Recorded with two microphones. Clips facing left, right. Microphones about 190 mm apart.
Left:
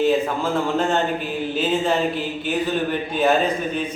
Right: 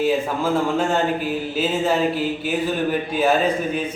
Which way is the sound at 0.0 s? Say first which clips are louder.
Left 1 dB; 10° right (ahead or behind).